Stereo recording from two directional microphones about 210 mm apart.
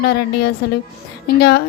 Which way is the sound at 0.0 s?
50° left (ahead or behind).